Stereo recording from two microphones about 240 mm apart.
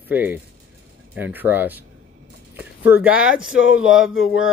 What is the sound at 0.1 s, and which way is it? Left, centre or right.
Speech, centre.